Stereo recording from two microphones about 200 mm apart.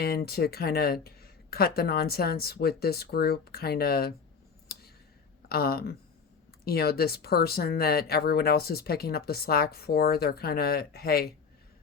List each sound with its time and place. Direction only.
0.0 s speech: 50° left (ahead or behind)
5.5 s speech: 50° left (ahead or behind)